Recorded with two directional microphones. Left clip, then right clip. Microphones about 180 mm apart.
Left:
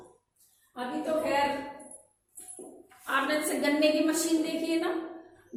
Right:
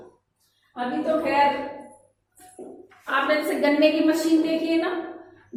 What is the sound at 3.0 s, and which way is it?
A woman's voice, 15° left (ahead or behind).